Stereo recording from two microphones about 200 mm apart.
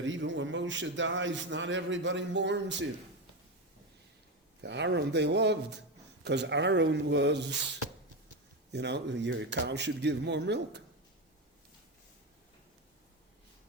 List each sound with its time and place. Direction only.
0.0 s a man's voice: 65° right (ahead or behind)
4.6 s a man's voice: 60° right (ahead or behind)
8.7 s a man's voice: 60° right (ahead or behind)